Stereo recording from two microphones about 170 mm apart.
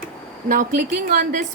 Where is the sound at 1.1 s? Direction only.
50° right (ahead or behind).